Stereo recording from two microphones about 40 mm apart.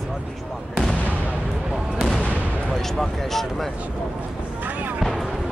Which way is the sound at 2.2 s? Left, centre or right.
Right.